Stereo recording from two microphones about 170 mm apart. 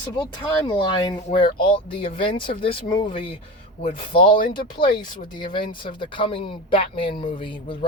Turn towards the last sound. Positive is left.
turn(degrees=30)  # may be behind; listen again after turning